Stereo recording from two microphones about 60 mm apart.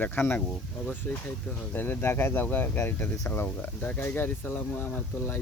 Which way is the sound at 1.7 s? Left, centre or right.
Left.